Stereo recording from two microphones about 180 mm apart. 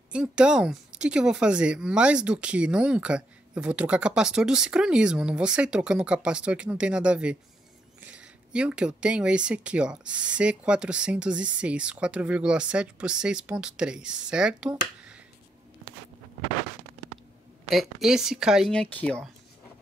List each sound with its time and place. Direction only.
0.1 s speech: 5° right (ahead or behind)
15.0 s a sound: 5° right (ahead or behind)
17.6 s speech: centre (ahead or behind)